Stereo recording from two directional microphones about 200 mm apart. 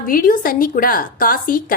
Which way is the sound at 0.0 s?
45° left (ahead or behind).